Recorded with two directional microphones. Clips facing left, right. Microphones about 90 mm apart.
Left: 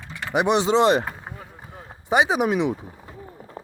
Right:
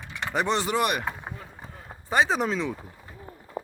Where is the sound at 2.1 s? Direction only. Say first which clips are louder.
Left 4 dB; 15° left (ahead or behind).